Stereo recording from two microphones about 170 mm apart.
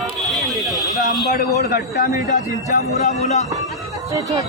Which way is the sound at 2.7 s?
40° left (ahead or behind).